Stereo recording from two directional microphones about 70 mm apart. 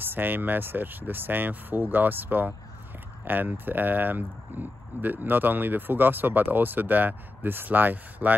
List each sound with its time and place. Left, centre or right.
0.0 s speech: right